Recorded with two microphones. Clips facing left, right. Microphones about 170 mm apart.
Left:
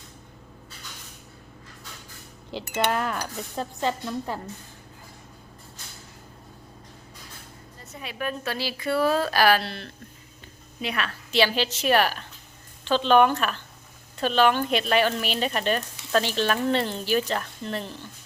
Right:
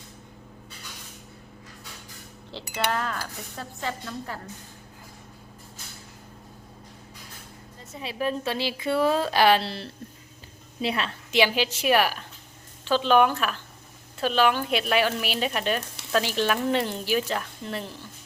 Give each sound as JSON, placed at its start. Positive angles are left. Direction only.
{"t": 2.5, "sound": "speech", "side_deg": 15}
{"t": 7.9, "sound": "a woman's voice", "side_deg": -30}
{"t": 11.3, "sound": "speech", "side_deg": -15}